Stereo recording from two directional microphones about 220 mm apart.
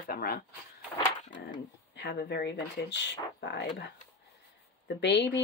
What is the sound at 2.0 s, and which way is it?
Speech, 50° left (ahead or behind).